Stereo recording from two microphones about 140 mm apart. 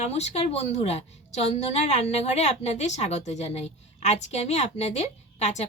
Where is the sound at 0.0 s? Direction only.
50° left (ahead or behind).